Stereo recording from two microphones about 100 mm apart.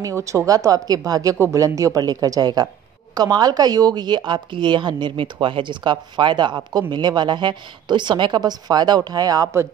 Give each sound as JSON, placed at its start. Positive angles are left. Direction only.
{"t": 0.0, "sound": "speech", "side_deg": -30}